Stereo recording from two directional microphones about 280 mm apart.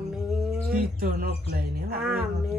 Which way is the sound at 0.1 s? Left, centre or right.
Centre.